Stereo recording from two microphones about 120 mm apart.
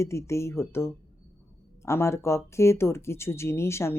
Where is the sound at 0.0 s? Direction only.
25° left (ahead or behind).